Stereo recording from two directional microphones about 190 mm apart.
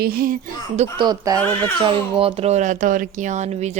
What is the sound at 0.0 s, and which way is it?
Speech, 50° right (ahead or behind).